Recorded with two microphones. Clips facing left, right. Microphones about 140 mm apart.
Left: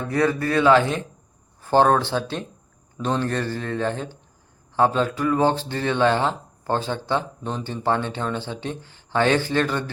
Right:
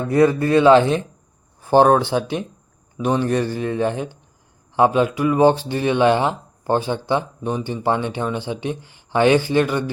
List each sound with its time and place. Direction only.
0.4 s speech: 20° right (ahead or behind)